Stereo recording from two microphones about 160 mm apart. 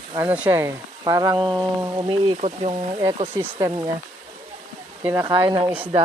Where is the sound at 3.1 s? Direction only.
25° right (ahead or behind).